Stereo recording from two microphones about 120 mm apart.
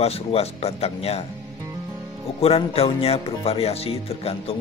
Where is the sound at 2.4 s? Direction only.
55° left (ahead or behind).